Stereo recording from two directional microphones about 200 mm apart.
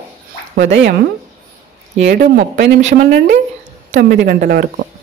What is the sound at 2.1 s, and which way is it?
Speech, 40° right (ahead or behind).